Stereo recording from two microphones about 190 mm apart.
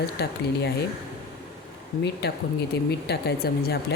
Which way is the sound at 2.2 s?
55° left (ahead or behind).